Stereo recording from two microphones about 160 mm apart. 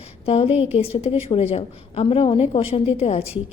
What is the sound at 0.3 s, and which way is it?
A woman's voice, 35° left (ahead or behind).